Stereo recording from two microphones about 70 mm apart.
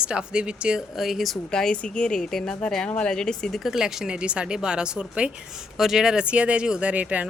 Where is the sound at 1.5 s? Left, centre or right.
Centre.